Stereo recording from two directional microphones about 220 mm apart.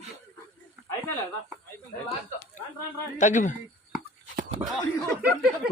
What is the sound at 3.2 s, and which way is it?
Speech, 35° left (ahead or behind).